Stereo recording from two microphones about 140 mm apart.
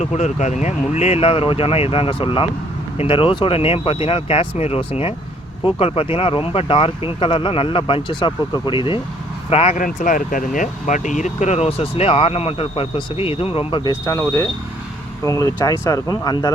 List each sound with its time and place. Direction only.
0.0 s speech: 55° left (ahead or behind)
9.8 s speech: 75° left (ahead or behind); by 13.9 s 35° left (ahead or behind)
14.0 s speech: 20° left (ahead or behind)